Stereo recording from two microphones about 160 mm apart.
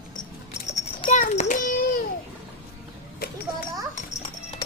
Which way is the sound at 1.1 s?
50° left (ahead or behind).